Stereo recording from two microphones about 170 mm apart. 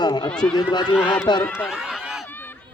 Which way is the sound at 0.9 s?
10° left (ahead or behind).